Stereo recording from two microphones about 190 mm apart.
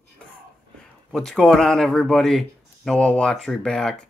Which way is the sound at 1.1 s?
5° left (ahead or behind).